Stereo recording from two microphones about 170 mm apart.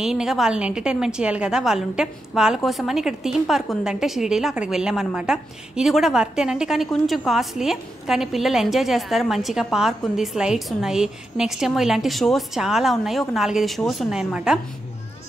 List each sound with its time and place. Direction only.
0.0 s a woman's voice: 5° right (ahead or behind)